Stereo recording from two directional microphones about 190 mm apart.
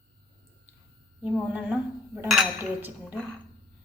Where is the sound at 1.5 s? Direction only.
5° right (ahead or behind).